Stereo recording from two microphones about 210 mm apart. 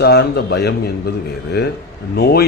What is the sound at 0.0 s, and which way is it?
Speech, 50° left (ahead or behind).